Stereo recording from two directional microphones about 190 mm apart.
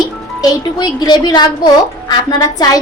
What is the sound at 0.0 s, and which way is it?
A woman's voice, 20° left (ahead or behind).